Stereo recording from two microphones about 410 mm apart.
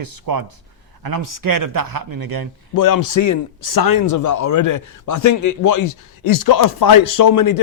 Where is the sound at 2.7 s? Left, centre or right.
Left.